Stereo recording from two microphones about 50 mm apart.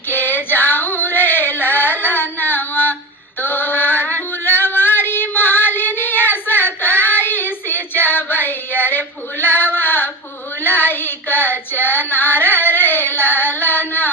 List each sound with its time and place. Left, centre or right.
0.1 s female singing: left
3.4 s music: left
10.6 s child singing: left